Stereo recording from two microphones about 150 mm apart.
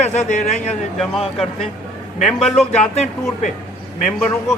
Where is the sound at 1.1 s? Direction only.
Centre (ahead or behind).